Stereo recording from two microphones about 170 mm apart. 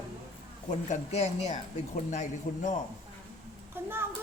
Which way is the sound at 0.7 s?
40° left (ahead or behind).